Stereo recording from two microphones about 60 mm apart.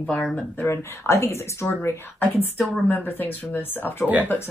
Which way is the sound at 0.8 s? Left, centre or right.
Left.